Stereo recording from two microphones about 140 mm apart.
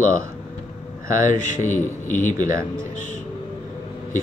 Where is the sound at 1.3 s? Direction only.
65° left (ahead or behind).